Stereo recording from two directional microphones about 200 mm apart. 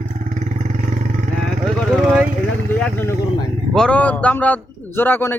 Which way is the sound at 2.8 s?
5° left (ahead or behind).